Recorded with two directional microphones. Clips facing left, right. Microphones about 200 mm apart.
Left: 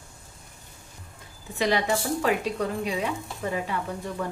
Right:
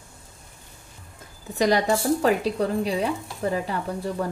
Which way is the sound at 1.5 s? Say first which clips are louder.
Right 4 dB; 40° right (ahead or behind).